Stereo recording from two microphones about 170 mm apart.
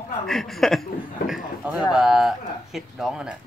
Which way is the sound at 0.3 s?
Centre (ahead or behind).